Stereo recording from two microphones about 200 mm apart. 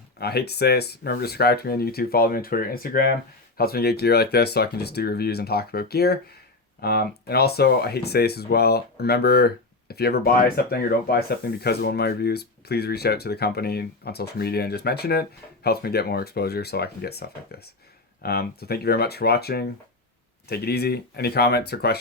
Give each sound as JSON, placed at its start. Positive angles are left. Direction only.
{"t": 0.2, "sound": "speech", "side_deg": 50}